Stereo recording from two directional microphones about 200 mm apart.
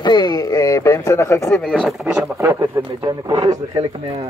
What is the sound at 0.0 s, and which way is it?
Speech, 20° left (ahead or behind).